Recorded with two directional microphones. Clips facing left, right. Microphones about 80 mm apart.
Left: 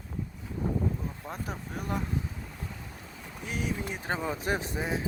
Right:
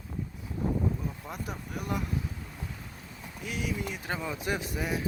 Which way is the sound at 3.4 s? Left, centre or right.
Left.